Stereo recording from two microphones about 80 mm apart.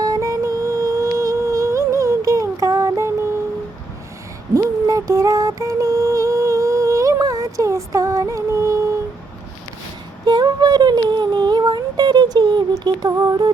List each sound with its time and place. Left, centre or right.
0.0 s music: right
4.5 s music: right
10.2 s a sound: right
12.8 s music: right